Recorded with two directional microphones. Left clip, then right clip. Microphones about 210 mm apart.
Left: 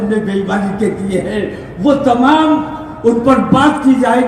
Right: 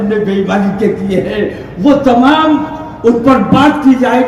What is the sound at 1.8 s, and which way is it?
Speech, 35° right (ahead or behind).